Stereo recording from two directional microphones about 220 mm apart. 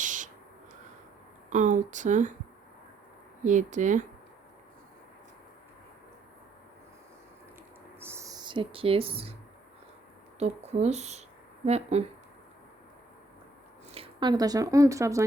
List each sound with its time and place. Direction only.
0.0 s a sound: 35° right (ahead or behind)
1.5 s speech: 35° right (ahead or behind)
3.4 s speech: 35° right (ahead or behind)
7.9 s a sound: 10° right (ahead or behind)
10.4 s speech: 30° right (ahead or behind)
13.9 s speech: 25° right (ahead or behind)